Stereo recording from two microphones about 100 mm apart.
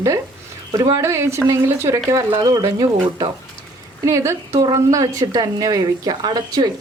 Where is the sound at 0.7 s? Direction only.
35° right (ahead or behind).